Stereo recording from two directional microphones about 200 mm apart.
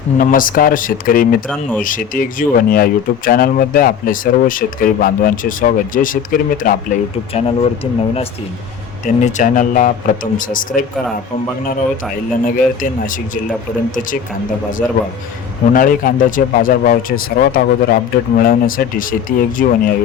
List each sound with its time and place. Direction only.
0.2 s speech: 45° left (ahead or behind)
7.3 s speech: 30° left (ahead or behind)
9.0 s speech: 40° left (ahead or behind)
12.5 s speech: 40° left (ahead or behind)
14.8 s a man's voice: 5° left (ahead or behind)
15.7 s speech: 45° left (ahead or behind)